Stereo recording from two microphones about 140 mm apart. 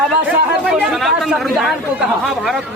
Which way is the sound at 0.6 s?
Centre (ahead or behind).